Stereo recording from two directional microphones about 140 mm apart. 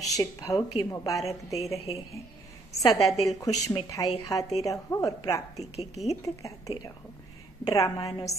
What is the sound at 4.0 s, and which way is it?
A woman's voice, 20° left (ahead or behind).